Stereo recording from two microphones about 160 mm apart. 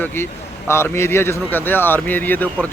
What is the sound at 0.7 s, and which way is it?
A man's voice, 15° left (ahead or behind).